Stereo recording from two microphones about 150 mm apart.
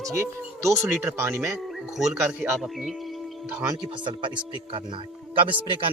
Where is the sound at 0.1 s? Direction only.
20° right (ahead or behind).